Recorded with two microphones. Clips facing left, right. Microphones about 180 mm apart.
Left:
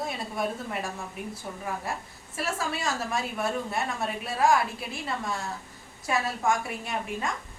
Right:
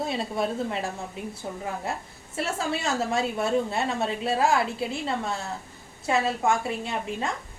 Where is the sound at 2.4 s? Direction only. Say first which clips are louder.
Right 3 dB; 25° right (ahead or behind).